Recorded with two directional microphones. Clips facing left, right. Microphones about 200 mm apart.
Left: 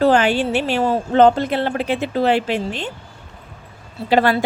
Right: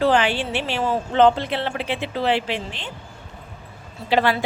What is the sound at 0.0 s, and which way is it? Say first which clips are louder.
Speech: left 4 dB; 45° left (ahead or behind).